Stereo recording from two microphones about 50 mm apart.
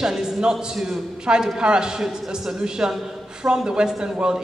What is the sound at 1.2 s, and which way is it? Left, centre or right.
A man's voice, centre.